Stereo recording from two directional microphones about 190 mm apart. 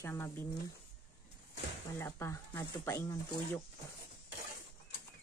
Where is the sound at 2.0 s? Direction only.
15° left (ahead or behind).